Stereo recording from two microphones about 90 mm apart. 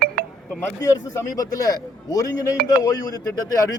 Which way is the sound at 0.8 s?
35° left (ahead or behind).